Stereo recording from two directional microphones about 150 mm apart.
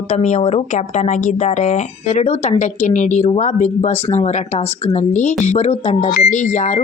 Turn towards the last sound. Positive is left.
turn(degrees=50)  # may be behind; listen again after turning